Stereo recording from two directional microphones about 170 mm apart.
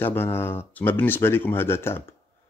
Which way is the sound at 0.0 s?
15° left (ahead or behind).